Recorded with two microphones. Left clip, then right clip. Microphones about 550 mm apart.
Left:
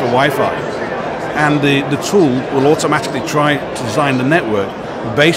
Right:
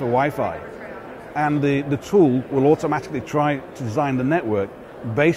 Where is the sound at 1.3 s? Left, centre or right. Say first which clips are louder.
Left 7 dB; right.